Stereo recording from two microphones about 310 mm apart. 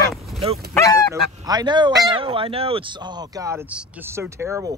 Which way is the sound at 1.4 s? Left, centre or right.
Centre.